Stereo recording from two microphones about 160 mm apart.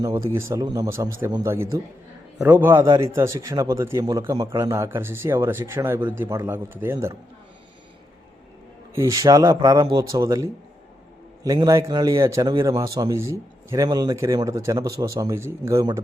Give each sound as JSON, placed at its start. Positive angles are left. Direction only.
{"t": 0.0, "sound": "a man's voice", "side_deg": -25}
{"t": 9.0, "sound": "a man's voice", "side_deg": -20}